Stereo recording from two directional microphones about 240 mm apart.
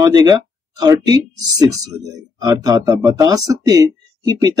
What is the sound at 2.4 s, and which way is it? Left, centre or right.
Speech, centre.